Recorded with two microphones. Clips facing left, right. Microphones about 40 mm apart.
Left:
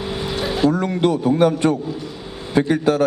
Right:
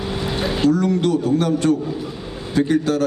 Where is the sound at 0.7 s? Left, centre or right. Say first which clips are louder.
Right 1 dB; left.